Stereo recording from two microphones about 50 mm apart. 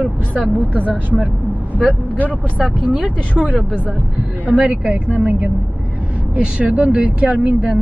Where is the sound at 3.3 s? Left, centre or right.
Right.